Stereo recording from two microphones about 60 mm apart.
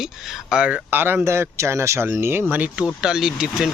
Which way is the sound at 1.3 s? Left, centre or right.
Right.